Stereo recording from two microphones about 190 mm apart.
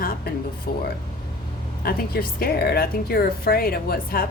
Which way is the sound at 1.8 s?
50° left (ahead or behind).